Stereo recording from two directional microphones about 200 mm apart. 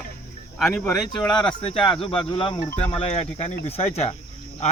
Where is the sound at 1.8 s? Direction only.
25° left (ahead or behind).